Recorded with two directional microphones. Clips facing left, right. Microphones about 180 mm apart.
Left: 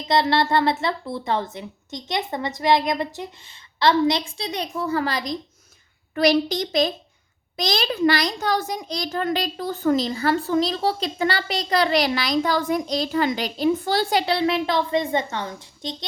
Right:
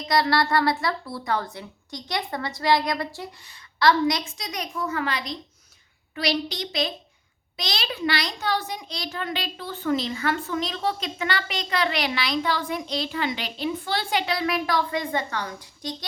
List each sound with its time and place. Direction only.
0.0 s a child's voice: 25° left (ahead or behind)